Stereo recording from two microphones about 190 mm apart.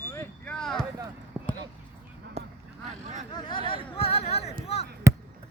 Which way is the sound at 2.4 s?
30° right (ahead or behind).